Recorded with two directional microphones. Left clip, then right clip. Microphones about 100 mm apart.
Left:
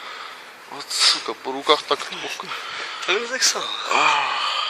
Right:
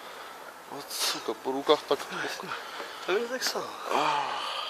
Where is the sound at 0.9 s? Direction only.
25° right (ahead or behind).